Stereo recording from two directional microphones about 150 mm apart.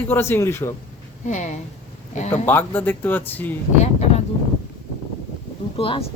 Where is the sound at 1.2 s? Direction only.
50° left (ahead or behind).